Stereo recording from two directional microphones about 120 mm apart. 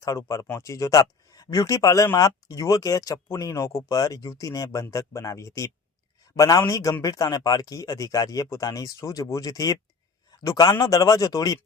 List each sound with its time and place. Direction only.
0.0 s speech: 25° left (ahead or behind)